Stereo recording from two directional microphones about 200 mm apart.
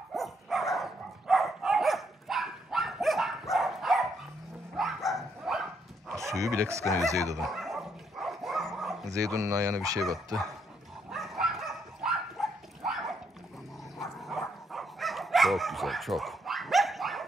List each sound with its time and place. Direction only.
0.1 s dog: centre (ahead or behind)
6.1 s speech: 15° right (ahead or behind)
7.4 s dog: centre (ahead or behind)
9.1 s speech: 15° right (ahead or behind)
11.1 s dog: centre (ahead or behind)
14.2 s dog: centre (ahead or behind)